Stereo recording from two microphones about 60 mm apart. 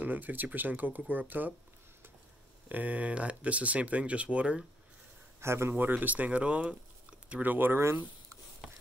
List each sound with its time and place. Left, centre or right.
0.0 s speech: right
2.7 s speech: right
5.4 s speech: right
5.7 s speech: right
7.4 s speech: right
8.6 s a sound: centre